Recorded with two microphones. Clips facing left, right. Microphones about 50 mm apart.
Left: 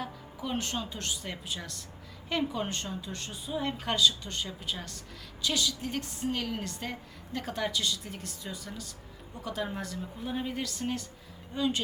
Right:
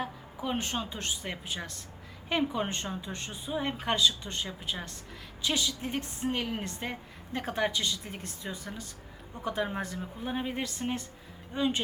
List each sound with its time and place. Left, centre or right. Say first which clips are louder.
0.0 s a woman's voice: right 2 dB; right